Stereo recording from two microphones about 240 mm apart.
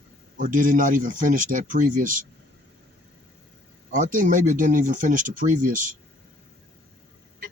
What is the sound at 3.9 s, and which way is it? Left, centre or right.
Speech, right.